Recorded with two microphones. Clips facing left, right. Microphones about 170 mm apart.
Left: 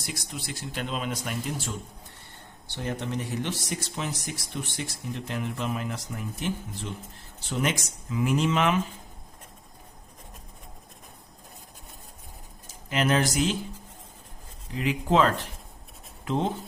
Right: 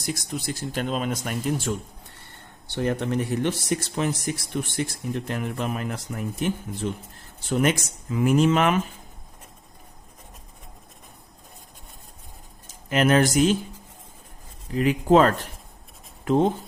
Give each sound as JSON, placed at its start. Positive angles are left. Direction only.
{"t": 0.0, "sound": "speech", "side_deg": -45}
{"t": 2.7, "sound": "speech", "side_deg": -60}
{"t": 12.9, "sound": "speech", "side_deg": -50}
{"t": 14.8, "sound": "speech", "side_deg": -45}